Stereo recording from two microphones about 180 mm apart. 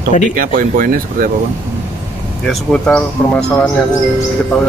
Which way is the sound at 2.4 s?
Centre (ahead or behind).